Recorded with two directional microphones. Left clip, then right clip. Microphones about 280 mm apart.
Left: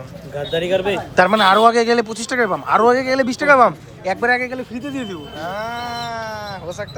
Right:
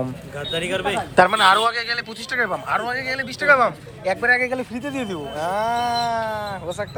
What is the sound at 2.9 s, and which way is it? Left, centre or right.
Speech, left.